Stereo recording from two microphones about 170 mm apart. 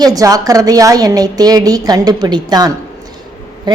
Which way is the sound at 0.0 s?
20° right (ahead or behind).